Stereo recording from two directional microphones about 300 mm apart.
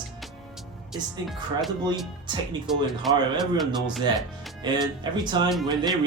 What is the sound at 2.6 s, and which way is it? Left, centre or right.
Speech, centre.